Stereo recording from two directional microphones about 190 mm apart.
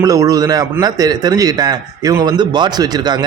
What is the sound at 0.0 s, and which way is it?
A man's voice, 20° right (ahead or behind).